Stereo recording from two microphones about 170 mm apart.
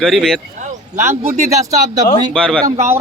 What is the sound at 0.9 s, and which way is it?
Speech, 15° right (ahead or behind).